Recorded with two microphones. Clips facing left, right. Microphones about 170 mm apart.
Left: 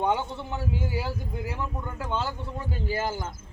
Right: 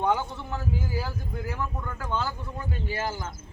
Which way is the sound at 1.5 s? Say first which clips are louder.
Right 2 dB; 25° left (ahead or behind).